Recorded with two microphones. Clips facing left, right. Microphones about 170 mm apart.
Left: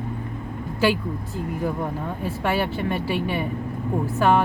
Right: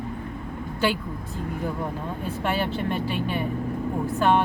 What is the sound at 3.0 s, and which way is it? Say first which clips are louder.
Speech: left 3 dB; 75° left (ahead or behind).